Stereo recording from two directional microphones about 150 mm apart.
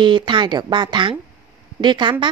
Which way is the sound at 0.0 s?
30° right (ahead or behind).